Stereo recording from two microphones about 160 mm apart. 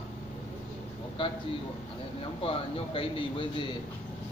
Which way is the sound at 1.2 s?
30° left (ahead or behind).